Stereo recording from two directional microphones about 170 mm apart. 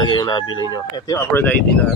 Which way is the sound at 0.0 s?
25° left (ahead or behind).